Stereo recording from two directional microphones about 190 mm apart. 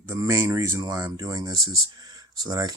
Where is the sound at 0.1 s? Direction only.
15° right (ahead or behind).